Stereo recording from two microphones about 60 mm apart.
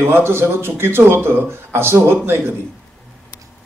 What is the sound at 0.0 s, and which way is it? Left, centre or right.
A man's voice, right.